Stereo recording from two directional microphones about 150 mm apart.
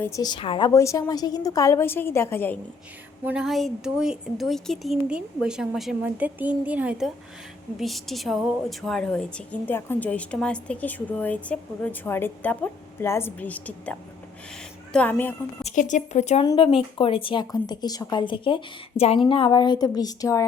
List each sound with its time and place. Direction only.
0.0 s a woman's voice: 25° left (ahead or behind)
0.7 s a woman's voice: 20° left (ahead or behind)
3.2 s a woman's voice: 5° right (ahead or behind)
14.9 s a woman's voice: 10° left (ahead or behind)
15.6 s speech: 55° left (ahead or behind)
16.4 s speech: 35° left (ahead or behind)